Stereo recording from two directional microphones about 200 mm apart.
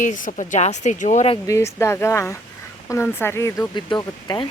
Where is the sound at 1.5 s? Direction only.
15° left (ahead or behind).